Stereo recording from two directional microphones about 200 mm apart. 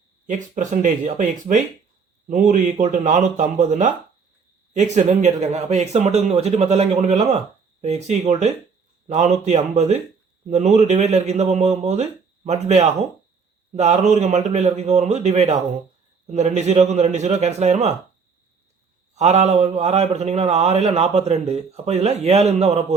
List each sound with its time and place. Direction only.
0.3 s speech: 40° right (ahead or behind)
19.1 s speech: 35° right (ahead or behind)